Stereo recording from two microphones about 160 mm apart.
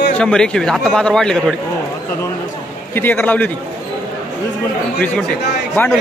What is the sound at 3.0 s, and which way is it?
Speech, 10° left (ahead or behind).